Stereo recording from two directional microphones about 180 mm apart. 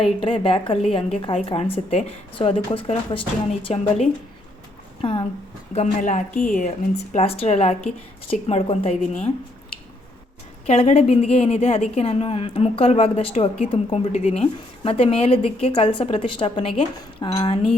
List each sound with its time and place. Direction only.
0.0 s a woman's voice: 30° left (ahead or behind)
5.7 s a woman's voice: 40° left (ahead or behind)
10.7 s a woman's voice: 35° left (ahead or behind)